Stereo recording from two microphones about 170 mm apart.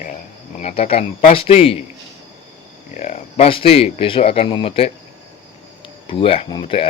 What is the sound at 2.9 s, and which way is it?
Speech, 45° left (ahead or behind).